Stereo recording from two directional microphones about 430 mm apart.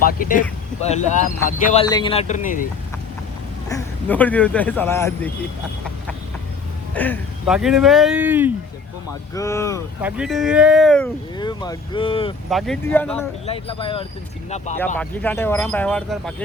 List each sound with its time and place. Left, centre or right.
0.2 s speech: centre
3.7 s speech: centre
6.9 s speech: centre
9.3 s speech: centre
12.5 s speech: centre